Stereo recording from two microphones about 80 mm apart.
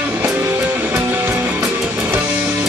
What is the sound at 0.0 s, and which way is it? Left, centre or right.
Music, right.